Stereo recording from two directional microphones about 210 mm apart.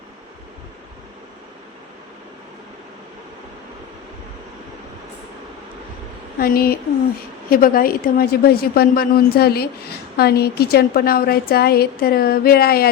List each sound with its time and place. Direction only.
6.4 s speech: 45° left (ahead or behind)